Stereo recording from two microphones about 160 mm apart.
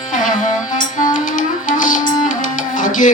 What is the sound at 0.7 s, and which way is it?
Music, 55° left (ahead or behind).